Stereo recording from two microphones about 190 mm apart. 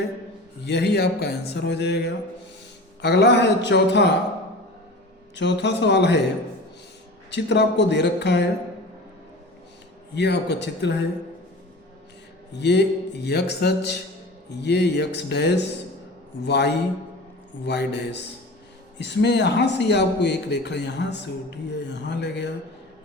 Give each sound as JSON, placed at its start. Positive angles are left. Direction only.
{"t": 0.6, "sound": "speech", "side_deg": 60}
{"t": 3.0, "sound": "speech", "side_deg": 65}
{"t": 5.3, "sound": "a man's voice", "side_deg": 70}
{"t": 7.3, "sound": "speech", "side_deg": 65}
{"t": 10.2, "sound": "speech", "side_deg": 60}
{"t": 12.5, "sound": "speech", "side_deg": 65}